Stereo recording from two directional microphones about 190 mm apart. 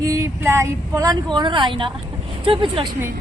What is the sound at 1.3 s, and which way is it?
A woman's voice, 25° right (ahead or behind).